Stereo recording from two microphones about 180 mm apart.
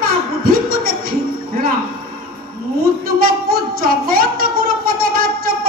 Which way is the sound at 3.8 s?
55° right (ahead or behind).